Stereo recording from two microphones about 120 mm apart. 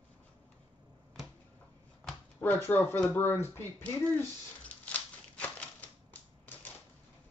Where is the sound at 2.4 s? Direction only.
15° left (ahead or behind).